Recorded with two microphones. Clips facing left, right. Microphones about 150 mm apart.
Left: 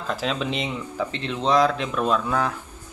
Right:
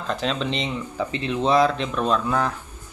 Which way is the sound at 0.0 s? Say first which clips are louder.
Right 1 dB; 5° left (ahead or behind).